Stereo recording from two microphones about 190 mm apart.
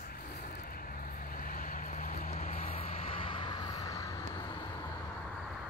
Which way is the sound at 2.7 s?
30° left (ahead or behind).